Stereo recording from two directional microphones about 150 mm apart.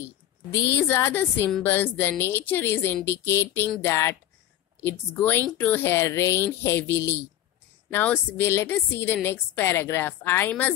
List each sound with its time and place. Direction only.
0.0 s a woman's voice: 15° left (ahead or behind)